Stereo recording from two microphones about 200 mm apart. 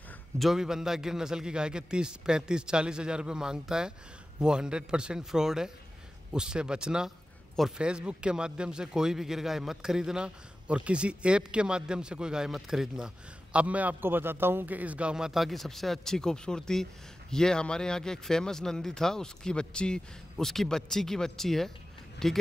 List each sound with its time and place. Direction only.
0.4 s a man's voice: centre (ahead or behind)